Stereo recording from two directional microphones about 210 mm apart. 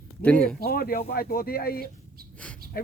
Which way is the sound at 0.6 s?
45° left (ahead or behind).